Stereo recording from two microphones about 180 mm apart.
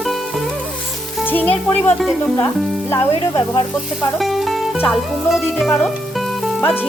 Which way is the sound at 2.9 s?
20° left (ahead or behind).